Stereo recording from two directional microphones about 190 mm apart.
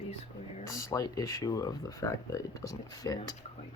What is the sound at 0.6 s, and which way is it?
Speech, 15° left (ahead or behind).